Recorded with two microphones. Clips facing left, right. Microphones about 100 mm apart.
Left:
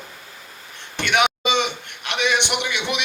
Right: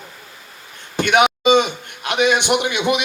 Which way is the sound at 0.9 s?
45° right (ahead or behind).